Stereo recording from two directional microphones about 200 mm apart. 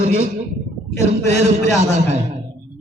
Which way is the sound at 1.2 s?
35° right (ahead or behind).